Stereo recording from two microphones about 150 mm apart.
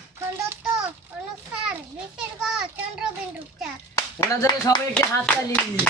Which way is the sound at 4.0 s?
20° left (ahead or behind).